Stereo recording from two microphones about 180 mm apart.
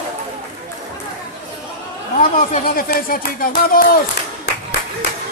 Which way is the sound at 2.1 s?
50° left (ahead or behind).